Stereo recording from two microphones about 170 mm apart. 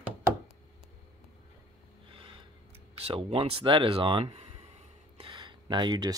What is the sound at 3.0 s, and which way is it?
Speech, 35° right (ahead or behind).